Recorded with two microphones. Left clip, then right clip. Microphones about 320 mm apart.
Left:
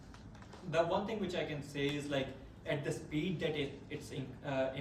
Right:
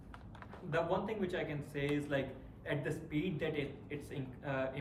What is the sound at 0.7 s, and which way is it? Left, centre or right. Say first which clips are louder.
Speech: left 2 dB; centre.